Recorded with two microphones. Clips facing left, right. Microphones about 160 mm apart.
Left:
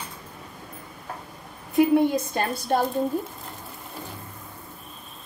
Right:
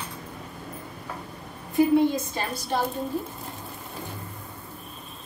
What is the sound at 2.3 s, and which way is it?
Speech, 55° left (ahead or behind).